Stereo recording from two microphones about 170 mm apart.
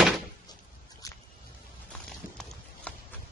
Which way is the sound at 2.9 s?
5° left (ahead or behind).